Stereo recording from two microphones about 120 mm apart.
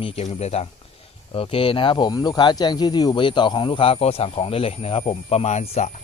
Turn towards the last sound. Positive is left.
turn(degrees=65)  # may be behind; listen again after turning